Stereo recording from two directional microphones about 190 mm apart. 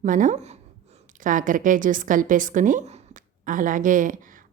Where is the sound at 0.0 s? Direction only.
40° right (ahead or behind).